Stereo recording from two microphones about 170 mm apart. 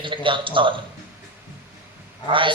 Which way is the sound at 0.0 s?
30° right (ahead or behind).